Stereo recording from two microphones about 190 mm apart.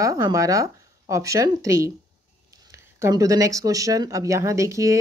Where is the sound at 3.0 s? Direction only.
15° right (ahead or behind).